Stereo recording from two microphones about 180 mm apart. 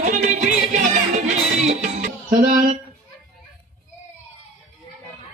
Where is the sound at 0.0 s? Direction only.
40° right (ahead or behind).